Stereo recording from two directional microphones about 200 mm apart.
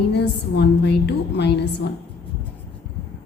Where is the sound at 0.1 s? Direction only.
60° left (ahead or behind).